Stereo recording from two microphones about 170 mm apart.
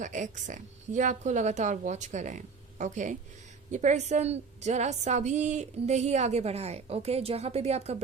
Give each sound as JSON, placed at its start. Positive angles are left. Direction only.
{"t": 0.0, "sound": "a woman's voice", "side_deg": -45}